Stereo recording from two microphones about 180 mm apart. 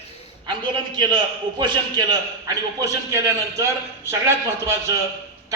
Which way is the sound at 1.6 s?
25° right (ahead or behind).